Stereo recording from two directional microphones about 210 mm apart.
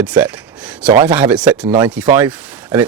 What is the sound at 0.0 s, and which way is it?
Speech, 5° right (ahead or behind).